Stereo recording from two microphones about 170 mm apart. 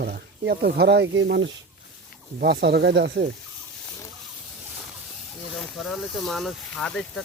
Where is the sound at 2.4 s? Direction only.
65° right (ahead or behind).